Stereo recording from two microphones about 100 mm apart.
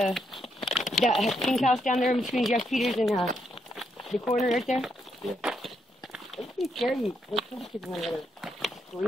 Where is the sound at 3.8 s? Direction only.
Centre (ahead or behind).